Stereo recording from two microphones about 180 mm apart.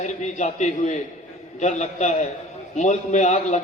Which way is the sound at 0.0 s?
40° left (ahead or behind).